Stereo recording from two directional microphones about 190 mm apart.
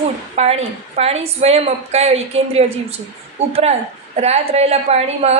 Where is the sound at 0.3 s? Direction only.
35° right (ahead or behind).